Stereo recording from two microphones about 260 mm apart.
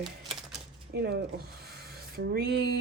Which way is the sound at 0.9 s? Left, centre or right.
Right.